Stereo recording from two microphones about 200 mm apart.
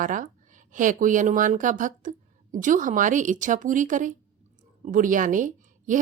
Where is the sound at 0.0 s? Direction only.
40° right (ahead or behind).